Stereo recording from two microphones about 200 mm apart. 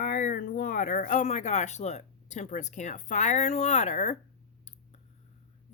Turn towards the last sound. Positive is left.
turn(degrees=35)  # may be behind; listen again after turning